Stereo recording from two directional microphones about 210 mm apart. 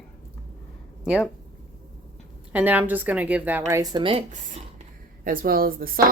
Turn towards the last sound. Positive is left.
turn(degrees=-45)  # may be behind; listen again after turning